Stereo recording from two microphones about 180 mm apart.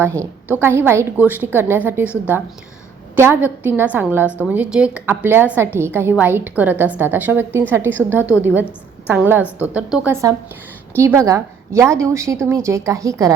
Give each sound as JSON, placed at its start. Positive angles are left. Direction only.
{"t": 0.0, "sound": "a woman's voice", "side_deg": -15}
{"t": 3.2, "sound": "a woman's voice", "side_deg": -10}